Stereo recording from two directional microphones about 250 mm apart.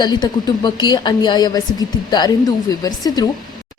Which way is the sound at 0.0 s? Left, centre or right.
Centre.